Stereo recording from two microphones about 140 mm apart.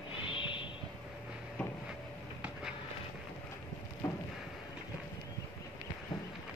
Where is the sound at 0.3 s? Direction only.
35° left (ahead or behind).